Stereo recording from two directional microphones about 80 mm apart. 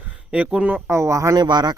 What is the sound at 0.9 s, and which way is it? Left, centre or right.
Speech, right.